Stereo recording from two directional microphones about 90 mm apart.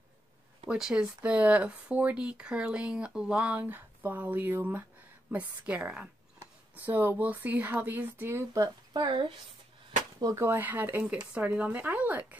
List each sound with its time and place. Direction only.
0.7 s speech: 10° right (ahead or behind); by 8.5 s 25° right (ahead or behind)
8.5 s speech: 55° right (ahead or behind)
10.3 s speech: 25° right (ahead or behind)